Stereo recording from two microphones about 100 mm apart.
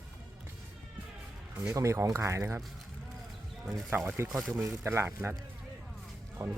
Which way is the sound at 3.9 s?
20° right (ahead or behind).